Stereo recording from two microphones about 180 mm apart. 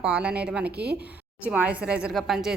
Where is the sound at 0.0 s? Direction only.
5° right (ahead or behind).